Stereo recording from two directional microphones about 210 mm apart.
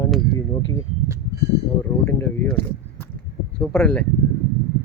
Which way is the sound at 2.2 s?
10° left (ahead or behind).